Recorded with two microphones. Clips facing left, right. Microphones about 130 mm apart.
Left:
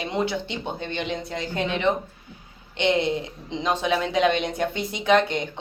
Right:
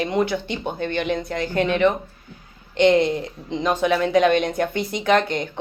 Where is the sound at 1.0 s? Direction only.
50° right (ahead or behind).